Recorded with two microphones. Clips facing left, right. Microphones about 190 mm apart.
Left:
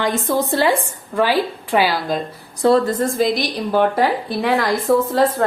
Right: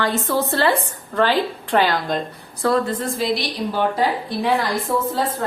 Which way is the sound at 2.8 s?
45° left (ahead or behind).